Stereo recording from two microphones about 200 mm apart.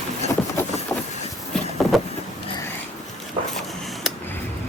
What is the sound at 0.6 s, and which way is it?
Vehicle, 10° left (ahead or behind).